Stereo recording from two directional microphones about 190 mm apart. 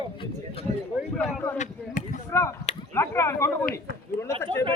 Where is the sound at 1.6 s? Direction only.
45° left (ahead or behind).